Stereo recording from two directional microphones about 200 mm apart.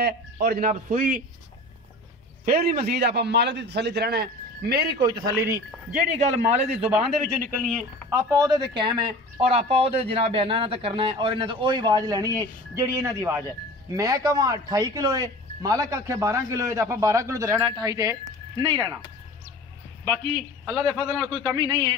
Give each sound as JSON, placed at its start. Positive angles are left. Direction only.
{"t": 0.5, "sound": "a man's voice", "side_deg": -40}
{"t": 2.4, "sound": "a man's voice", "side_deg": -50}
{"t": 5.0, "sound": "speech", "side_deg": -15}
{"t": 5.9, "sound": "a man's voice", "side_deg": -40}
{"t": 7.6, "sound": "a man's voice", "side_deg": 0}
{"t": 8.1, "sound": "speech", "side_deg": -15}
{"t": 20.6, "sound": "a man's voice", "side_deg": -5}